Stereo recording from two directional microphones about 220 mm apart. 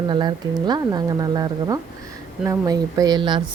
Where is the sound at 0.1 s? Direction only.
20° right (ahead or behind).